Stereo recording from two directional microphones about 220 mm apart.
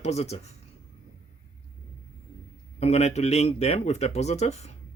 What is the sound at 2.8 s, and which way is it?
Speech, 30° left (ahead or behind).